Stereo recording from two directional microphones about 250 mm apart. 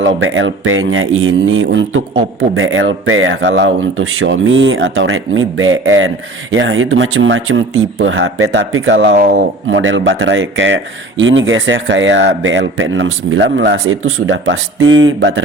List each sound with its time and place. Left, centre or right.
0.2 s speech: right